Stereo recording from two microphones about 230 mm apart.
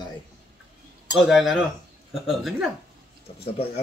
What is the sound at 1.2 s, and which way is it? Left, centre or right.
Speech, centre.